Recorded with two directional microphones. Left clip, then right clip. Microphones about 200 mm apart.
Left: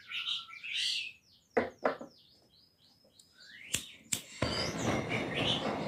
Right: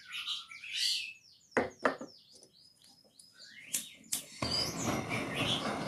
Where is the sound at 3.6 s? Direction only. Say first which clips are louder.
Left 3 dB; 55° left (ahead or behind); by 5.3 s 30° left (ahead or behind).